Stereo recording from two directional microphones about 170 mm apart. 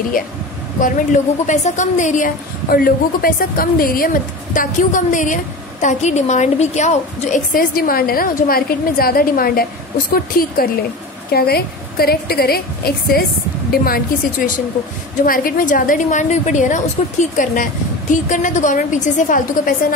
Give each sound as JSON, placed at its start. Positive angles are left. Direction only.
{"t": 0.7, "sound": "a woman's voice", "side_deg": 50}